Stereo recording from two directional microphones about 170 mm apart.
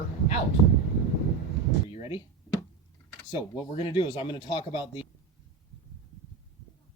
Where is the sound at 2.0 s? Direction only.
30° left (ahead or behind).